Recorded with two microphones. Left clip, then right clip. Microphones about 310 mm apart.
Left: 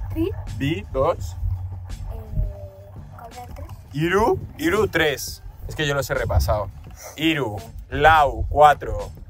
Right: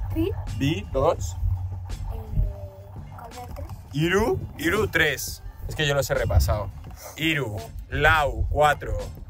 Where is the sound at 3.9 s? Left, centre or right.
Centre.